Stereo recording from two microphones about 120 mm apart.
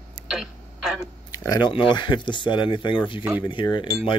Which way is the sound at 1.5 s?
40° left (ahead or behind).